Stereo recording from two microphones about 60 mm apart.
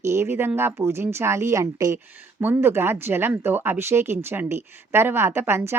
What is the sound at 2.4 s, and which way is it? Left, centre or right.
Speech, right.